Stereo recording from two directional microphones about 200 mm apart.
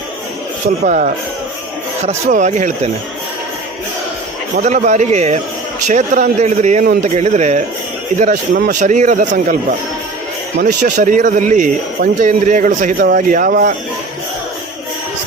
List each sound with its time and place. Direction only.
0.9 s speech: 40° right (ahead or behind)
4.5 s speech: 35° right (ahead or behind)